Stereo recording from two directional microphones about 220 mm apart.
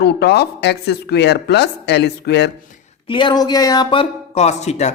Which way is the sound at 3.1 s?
20° left (ahead or behind).